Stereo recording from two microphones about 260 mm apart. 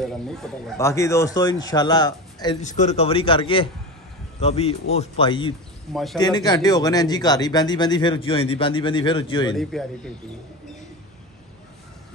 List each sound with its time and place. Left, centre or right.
0.0 s a man's voice: centre
0.7 s speech: centre
2.6 s a man's voice: left
9.6 s a man's voice: centre